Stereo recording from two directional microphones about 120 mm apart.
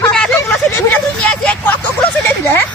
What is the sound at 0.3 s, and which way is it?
Vehicle, 20° left (ahead or behind).